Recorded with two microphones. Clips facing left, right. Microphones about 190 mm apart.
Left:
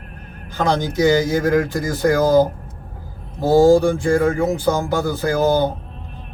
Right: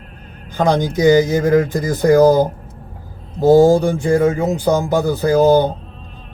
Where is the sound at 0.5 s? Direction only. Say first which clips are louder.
Right 3 dB; 15° right (ahead or behind).